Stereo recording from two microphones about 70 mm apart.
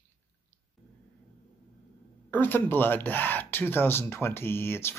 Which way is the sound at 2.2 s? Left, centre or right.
Left.